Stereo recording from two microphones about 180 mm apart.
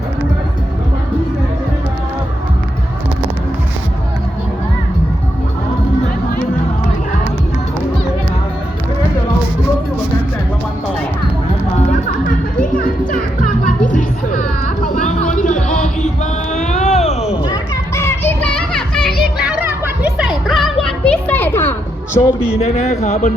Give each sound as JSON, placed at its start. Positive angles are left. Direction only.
{"t": 13.1, "sound": "music", "side_deg": 50}
{"t": 16.5, "sound": "children playing", "side_deg": 40}
{"t": 20.1, "sound": "music", "side_deg": 0}
{"t": 22.5, "sound": "speech", "side_deg": 40}